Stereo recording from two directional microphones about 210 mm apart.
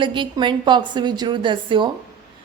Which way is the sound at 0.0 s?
20° right (ahead or behind).